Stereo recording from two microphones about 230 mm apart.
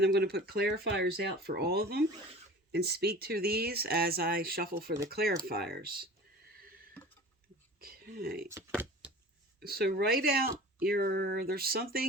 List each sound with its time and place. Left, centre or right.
0.0 s speech: right
7.8 s speech: right
8.8 s a sound: centre
9.6 s speech: right